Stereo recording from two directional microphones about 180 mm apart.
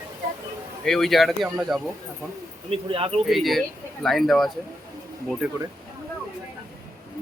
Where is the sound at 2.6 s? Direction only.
30° right (ahead or behind).